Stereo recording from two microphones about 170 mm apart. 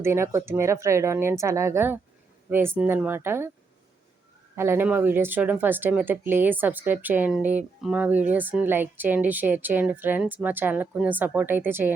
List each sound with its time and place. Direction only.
0.0 s speech: 15° right (ahead or behind)
4.5 s speech: 15° right (ahead or behind)